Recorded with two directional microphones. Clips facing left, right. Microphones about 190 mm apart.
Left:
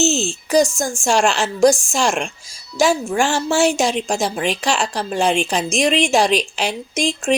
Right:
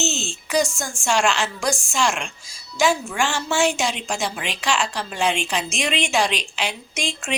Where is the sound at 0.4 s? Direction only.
40° left (ahead or behind).